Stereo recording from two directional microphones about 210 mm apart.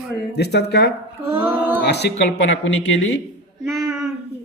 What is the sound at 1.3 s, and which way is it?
Female singing, 10° right (ahead or behind).